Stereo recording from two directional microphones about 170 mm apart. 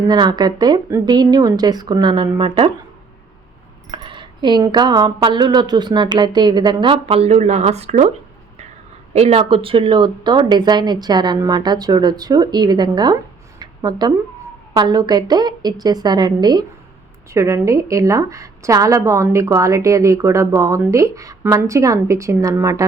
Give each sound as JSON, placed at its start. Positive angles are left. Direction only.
{"t": 0.1, "sound": "speech", "side_deg": -25}
{"t": 3.9, "sound": "speech", "side_deg": -30}
{"t": 9.1, "sound": "speech", "side_deg": -35}
{"t": 13.6, "sound": "a sound", "side_deg": -25}
{"t": 14.7, "sound": "a woman's voice", "side_deg": -25}